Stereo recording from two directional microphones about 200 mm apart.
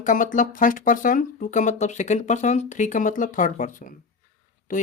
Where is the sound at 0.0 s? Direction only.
40° left (ahead or behind).